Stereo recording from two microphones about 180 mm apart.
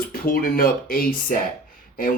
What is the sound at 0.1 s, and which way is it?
Speech, 55° left (ahead or behind).